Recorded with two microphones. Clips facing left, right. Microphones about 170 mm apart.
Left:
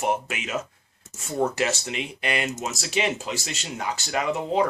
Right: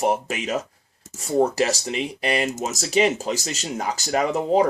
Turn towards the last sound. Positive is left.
turn(degrees=-40)  # may be behind; listen again after turning